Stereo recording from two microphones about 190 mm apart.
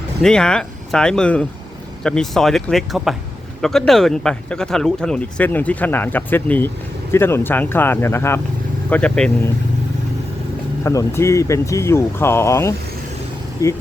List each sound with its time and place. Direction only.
0.2 s speech: 5° left (ahead or behind)
10.8 s speech: 15° left (ahead or behind)